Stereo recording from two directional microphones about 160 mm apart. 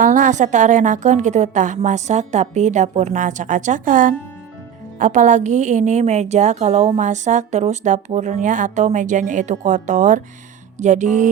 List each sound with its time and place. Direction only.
0.0 s a woman's voice: 55° right (ahead or behind)